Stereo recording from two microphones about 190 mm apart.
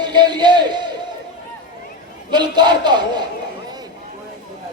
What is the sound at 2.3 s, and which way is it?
Speech, 25° right (ahead or behind).